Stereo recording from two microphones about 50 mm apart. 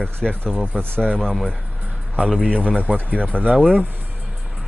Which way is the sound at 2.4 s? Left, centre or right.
Left.